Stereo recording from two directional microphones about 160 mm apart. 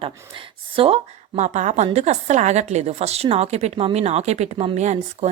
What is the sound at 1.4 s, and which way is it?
A woman's voice, 45° right (ahead or behind).